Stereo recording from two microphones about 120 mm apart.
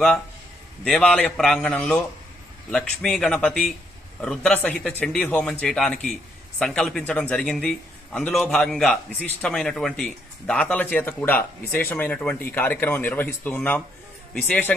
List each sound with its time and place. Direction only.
0.8 s a man's voice: 5° left (ahead or behind)